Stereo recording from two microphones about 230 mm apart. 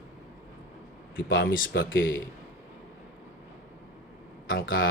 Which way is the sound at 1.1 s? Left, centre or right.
Left.